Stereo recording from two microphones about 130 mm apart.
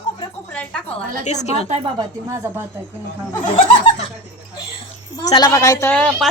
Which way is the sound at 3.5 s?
65° left (ahead or behind).